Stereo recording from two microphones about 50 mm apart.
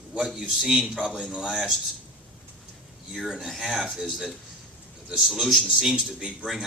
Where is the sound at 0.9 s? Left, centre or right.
Centre.